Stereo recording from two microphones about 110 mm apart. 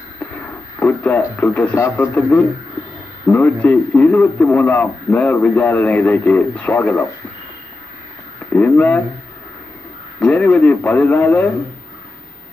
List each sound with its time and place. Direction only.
0.7 s speech: 15° left (ahead or behind)
8.5 s speech: 15° left (ahead or behind)
10.2 s speech: 10° left (ahead or behind)